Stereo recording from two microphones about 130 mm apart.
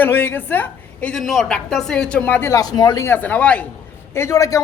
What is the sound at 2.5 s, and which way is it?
Speech, 30° left (ahead or behind).